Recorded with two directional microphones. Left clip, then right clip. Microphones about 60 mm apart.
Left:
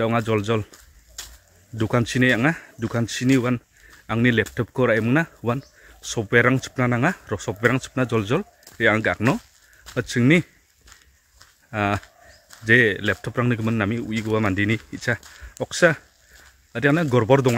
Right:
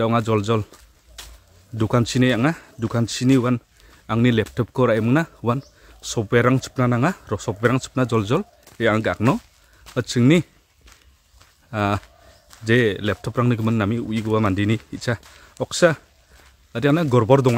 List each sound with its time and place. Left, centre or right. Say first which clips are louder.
0.0 s speech: right 2 dB; right
0.7 s a sound: even; centre
1.8 s speech: right 1 dB; right
5.9 s speech: left 1 dB; right
11.7 s speech: right 1 dB; right
15.0 s speech: left 1 dB; right
16.7 s speech: even; right
17.1 s speech: right 3 dB; right